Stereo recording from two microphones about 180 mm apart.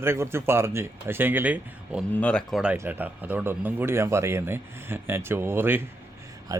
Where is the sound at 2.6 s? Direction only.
10° right (ahead or behind).